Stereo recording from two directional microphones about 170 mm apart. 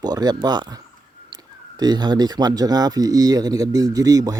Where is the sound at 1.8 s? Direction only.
25° right (ahead or behind).